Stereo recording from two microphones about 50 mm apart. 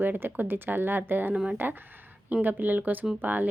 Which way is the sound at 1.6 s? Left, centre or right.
Right.